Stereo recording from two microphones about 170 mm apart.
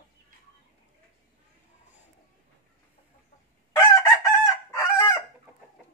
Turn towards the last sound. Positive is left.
turn(degrees=15)  # may be behind; listen again after turning